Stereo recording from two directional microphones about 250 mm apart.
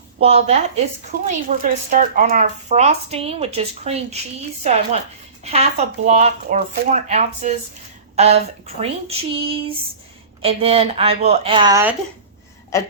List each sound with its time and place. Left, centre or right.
0.2 s speech: right; by 11.9 s centre